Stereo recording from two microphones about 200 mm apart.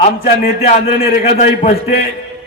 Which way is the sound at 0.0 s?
40° left (ahead or behind).